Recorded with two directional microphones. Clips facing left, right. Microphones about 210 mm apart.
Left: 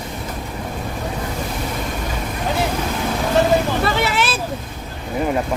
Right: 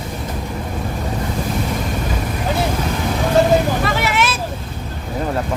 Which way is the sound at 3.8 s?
30° left (ahead or behind).